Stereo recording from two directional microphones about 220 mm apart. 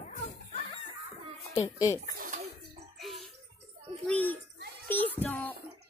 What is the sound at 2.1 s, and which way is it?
Bird, 40° right (ahead or behind).